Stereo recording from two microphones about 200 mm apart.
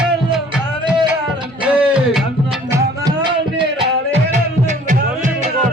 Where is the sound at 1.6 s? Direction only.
5° right (ahead or behind).